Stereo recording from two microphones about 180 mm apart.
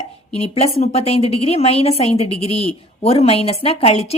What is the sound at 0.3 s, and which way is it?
A woman's voice, 35° left (ahead or behind).